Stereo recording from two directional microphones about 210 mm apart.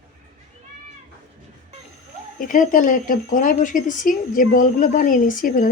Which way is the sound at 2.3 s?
40° left (ahead or behind).